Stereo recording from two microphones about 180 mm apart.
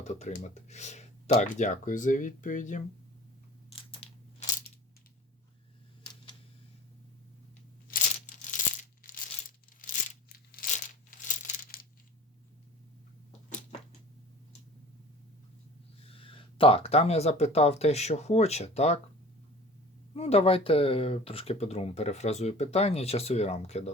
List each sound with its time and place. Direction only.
0.0 s speech: 40° left (ahead or behind)
3.7 s a sound: 30° left (ahead or behind)
7.9 s tearing: 45° left (ahead or behind)
9.8 s a sound: 50° left (ahead or behind)
16.0 s speech: 30° left (ahead or behind)
20.1 s speech: 35° left (ahead or behind)